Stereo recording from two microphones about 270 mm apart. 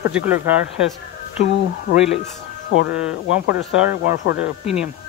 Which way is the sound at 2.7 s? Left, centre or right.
Left.